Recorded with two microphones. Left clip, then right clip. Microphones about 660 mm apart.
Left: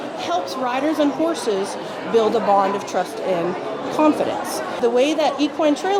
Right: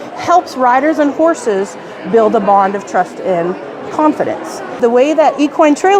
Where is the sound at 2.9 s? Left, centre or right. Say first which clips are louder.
Right 11 dB; right.